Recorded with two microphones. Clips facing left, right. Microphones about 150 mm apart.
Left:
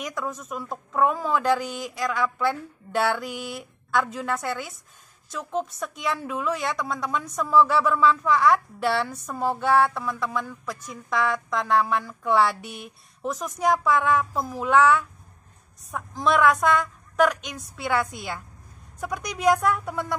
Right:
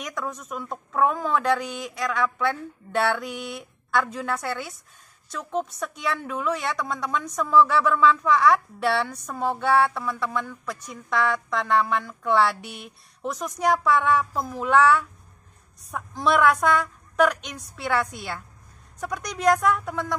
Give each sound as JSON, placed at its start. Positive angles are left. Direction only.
{"t": 0.0, "sound": "a woman's voice", "side_deg": 5}